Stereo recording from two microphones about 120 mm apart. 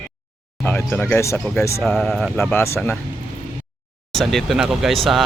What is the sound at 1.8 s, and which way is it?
Speech, centre (ahead or behind).